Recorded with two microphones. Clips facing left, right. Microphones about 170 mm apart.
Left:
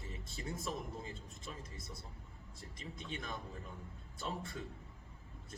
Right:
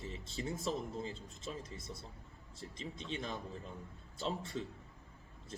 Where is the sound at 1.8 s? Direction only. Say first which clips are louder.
Right 3 dB; centre (ahead or behind).